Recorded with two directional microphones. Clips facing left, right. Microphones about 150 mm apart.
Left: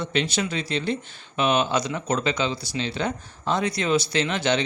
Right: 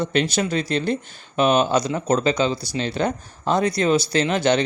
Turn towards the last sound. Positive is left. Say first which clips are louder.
# right 4 dB
turn(degrees=-40)  # may be behind; listen again after turning